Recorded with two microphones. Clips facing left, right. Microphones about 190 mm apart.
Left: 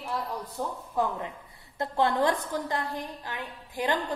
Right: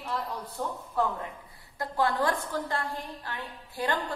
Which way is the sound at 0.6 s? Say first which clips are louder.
Even; 10° left (ahead or behind).